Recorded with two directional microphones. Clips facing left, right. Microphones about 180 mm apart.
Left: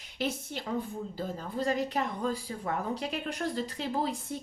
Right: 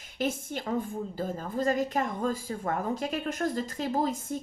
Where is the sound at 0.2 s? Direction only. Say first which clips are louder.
Right 3 dB; 50° right (ahead or behind).